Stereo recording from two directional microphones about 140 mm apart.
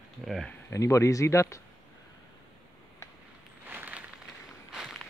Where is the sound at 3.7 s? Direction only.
10° right (ahead or behind).